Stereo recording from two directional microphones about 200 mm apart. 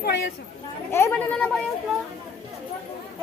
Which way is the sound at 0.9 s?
10° left (ahead or behind).